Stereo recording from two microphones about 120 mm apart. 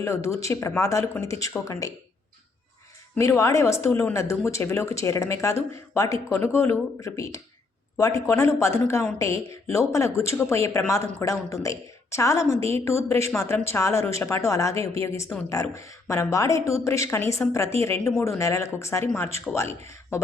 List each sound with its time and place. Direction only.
0.0 s speech: 25° left (ahead or behind)
3.2 s speech: 25° left (ahead or behind)